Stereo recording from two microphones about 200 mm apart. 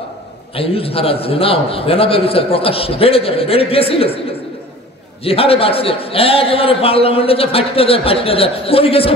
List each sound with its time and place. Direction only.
0.6 s a man's voice: 30° left (ahead or behind)
5.2 s a man's voice: 30° left (ahead or behind)